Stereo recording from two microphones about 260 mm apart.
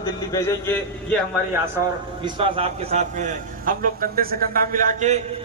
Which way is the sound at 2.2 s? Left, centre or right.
Right.